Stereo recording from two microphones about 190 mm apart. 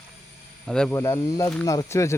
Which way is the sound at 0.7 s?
5° left (ahead or behind).